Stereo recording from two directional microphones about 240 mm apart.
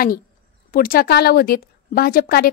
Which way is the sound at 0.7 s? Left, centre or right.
Left.